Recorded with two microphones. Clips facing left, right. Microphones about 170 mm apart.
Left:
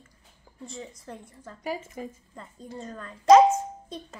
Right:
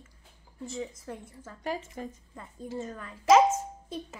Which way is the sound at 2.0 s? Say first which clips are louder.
Left 1 dB; 5° left (ahead or behind).